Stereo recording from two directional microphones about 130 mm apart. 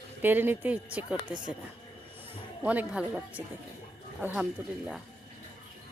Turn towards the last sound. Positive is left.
turn(degrees=-15)  # may be behind; listen again after turning